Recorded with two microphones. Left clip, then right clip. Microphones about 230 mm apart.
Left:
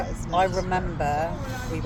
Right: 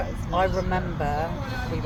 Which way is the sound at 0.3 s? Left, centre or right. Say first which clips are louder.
Left 1 dB; left.